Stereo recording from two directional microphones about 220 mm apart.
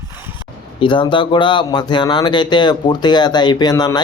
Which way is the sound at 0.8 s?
20° left (ahead or behind).